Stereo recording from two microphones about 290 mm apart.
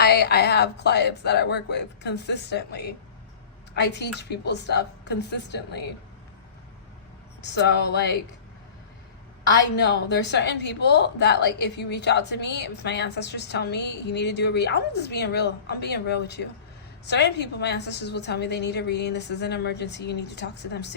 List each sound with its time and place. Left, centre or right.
0.0 s a woman's voice: left
7.4 s a woman's voice: left
9.7 s a woman's voice: left